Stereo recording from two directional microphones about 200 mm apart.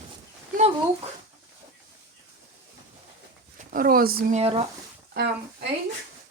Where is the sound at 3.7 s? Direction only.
45° right (ahead or behind); by 4.7 s 30° right (ahead or behind).